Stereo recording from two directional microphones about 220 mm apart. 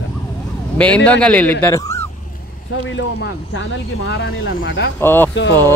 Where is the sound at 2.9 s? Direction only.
60° left (ahead or behind).